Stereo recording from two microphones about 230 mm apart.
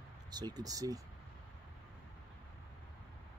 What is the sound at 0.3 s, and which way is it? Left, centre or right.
Speech, centre.